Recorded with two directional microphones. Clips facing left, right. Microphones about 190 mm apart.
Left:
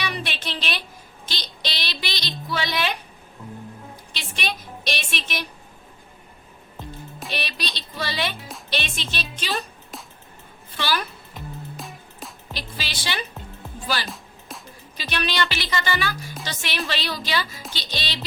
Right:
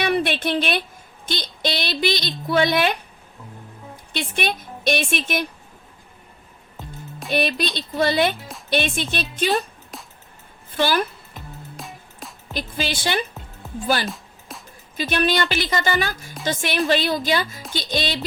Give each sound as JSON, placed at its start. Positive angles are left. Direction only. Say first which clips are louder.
{"t": 0.0, "sound": "a sound", "louder": "right 9 dB", "side_deg": -55}
{"t": 1.2, "sound": "a woman's voice", "louder": "right 8 dB", "side_deg": -50}
{"t": 4.1, "sound": "a woman's voice", "louder": "right 7 dB", "side_deg": -55}
{"t": 6.7, "sound": "music", "louder": "even", "side_deg": 0}
{"t": 7.3, "sound": "a woman's voice", "louder": "right 11 dB", "side_deg": -50}
{"t": 9.9, "sound": "music", "louder": "even", "side_deg": 0}
{"t": 10.7, "sound": "a woman's voice", "louder": "right 6 dB", "side_deg": -50}
{"t": 11.8, "sound": "music", "louder": "even", "side_deg": 0}
{"t": 12.5, "sound": "a woman's voice", "louder": "right 9 dB", "side_deg": -50}
{"t": 14.1, "sound": "music", "louder": "right 2 dB", "side_deg": 0}
{"t": 14.9, "sound": "a woman's voice", "louder": "right 6 dB", "side_deg": -50}